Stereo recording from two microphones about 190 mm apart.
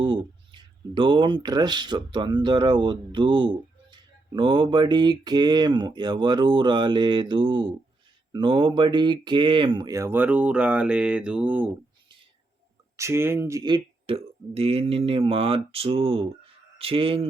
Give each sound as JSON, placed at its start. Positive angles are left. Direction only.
{"t": 0.0, "sound": "mantra", "side_deg": -25}
{"t": 8.3, "sound": "speech", "side_deg": -25}
{"t": 13.0, "sound": "mantra", "side_deg": -15}
{"t": 16.7, "sound": "speech", "side_deg": -30}